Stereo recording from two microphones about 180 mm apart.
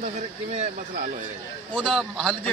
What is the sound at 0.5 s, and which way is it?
Speech, 40° right (ahead or behind).